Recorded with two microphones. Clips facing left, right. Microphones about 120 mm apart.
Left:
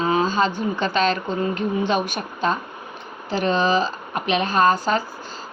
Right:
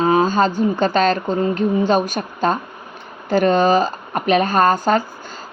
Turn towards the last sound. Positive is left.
turn(degrees=-45)  # may be behind; listen again after turning